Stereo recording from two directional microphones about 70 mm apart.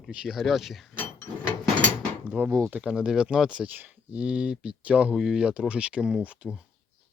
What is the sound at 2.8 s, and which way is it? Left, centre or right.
Speech, centre.